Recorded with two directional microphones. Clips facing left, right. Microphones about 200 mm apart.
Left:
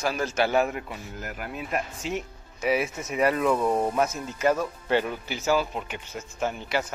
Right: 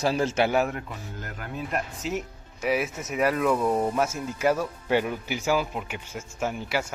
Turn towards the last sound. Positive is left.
turn(degrees=-5)  # may be behind; listen again after turning